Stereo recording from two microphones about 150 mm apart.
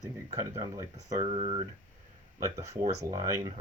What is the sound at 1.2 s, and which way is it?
Speech, 40° right (ahead or behind).